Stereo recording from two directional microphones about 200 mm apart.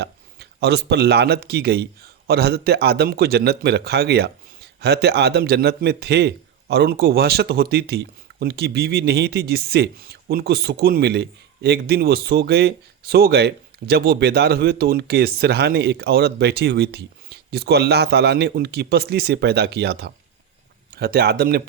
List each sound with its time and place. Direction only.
0.0 s speech: 55° right (ahead or behind)